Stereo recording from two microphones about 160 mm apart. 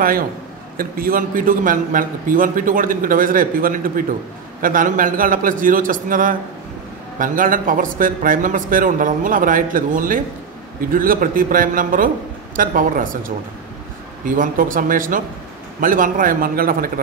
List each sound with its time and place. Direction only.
0.7 s a man's voice: 65° right (ahead or behind)